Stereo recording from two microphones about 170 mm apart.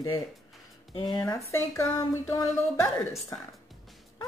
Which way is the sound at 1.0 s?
25° left (ahead or behind).